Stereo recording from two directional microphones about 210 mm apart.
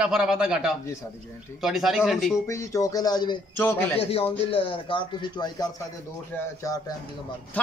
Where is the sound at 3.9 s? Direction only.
25° left (ahead or behind).